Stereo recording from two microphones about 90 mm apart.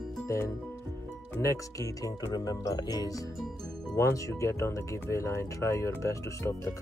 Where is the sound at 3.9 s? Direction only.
35° left (ahead or behind).